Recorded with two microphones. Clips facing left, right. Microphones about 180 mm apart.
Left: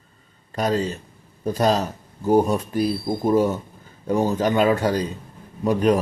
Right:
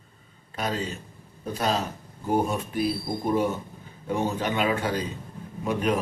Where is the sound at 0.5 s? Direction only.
40° left (ahead or behind).